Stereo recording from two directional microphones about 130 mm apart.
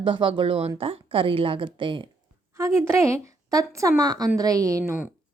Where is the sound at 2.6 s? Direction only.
20° right (ahead or behind).